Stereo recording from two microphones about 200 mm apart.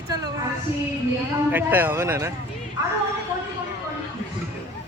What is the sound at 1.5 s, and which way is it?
Speech, 10° right (ahead or behind).